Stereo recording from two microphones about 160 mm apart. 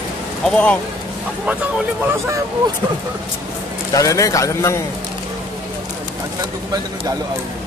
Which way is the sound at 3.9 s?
20° left (ahead or behind).